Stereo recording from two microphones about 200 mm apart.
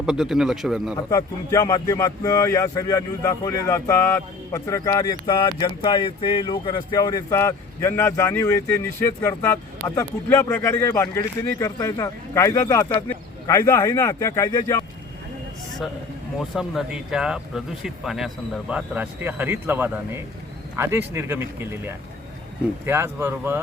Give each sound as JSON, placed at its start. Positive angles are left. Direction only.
{"t": 0.0, "sound": "speech", "side_deg": -5}
{"t": 0.9, "sound": "speech", "side_deg": 15}
{"t": 16.4, "sound": "speech", "side_deg": 0}